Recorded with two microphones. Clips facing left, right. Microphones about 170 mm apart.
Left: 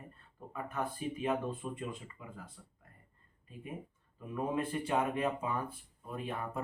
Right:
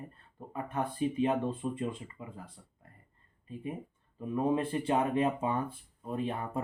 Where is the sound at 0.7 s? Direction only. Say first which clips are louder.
Right 6 dB; 30° right (ahead or behind).